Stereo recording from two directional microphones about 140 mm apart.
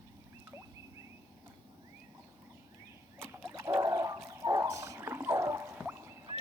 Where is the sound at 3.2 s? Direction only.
15° right (ahead or behind).